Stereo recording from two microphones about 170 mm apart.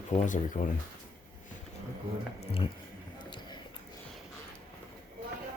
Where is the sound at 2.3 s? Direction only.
35° left (ahead or behind).